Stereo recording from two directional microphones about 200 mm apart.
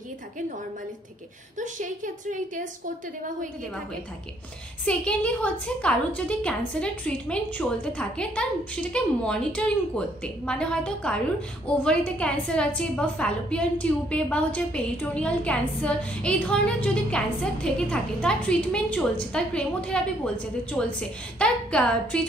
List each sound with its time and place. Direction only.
1.6 s a woman's voice: 40° right (ahead or behind)
4.8 s a woman's voice: 5° left (ahead or behind)